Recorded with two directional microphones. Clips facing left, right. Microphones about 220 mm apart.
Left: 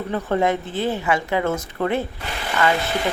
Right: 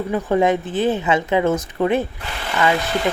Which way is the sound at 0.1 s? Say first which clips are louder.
Right 3 dB; 15° right (ahead or behind).